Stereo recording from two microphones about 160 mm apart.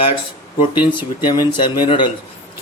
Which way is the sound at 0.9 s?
30° left (ahead or behind).